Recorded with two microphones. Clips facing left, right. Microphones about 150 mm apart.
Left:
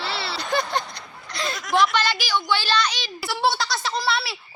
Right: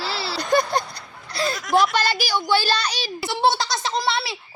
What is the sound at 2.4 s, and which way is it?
Child singing, 40° right (ahead or behind).